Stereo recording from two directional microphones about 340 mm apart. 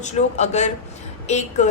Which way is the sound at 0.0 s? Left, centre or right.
Centre.